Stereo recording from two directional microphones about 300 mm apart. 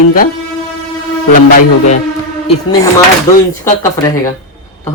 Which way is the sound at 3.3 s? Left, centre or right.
Centre.